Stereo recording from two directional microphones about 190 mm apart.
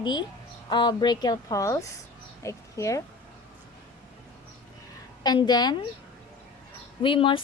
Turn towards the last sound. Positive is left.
turn(degrees=25)  # may be behind; listen again after turning